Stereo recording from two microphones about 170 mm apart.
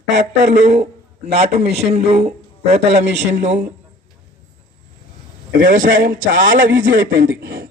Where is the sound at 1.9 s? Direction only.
40° right (ahead or behind).